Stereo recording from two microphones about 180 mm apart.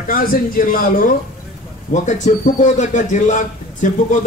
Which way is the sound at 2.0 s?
40° left (ahead or behind).